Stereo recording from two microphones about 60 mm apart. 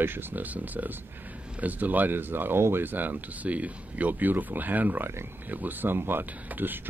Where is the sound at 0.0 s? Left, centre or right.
Right.